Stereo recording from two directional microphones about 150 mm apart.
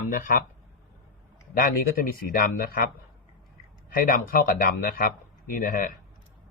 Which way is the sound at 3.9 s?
70° left (ahead or behind).